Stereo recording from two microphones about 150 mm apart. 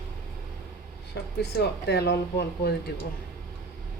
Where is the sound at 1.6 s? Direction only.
90° left.